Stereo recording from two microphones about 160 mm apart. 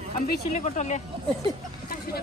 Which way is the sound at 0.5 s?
45° left (ahead or behind).